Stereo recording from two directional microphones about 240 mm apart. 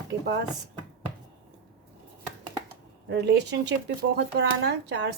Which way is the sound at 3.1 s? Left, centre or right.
Right.